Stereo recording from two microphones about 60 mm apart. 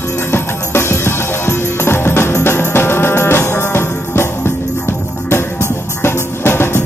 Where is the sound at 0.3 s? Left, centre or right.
Left.